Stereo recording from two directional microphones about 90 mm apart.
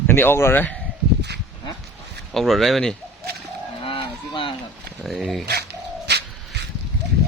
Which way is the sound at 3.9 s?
70° left (ahead or behind).